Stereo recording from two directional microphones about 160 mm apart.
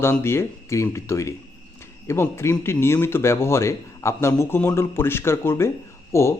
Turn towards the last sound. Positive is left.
turn(degrees=15)  # may be behind; listen again after turning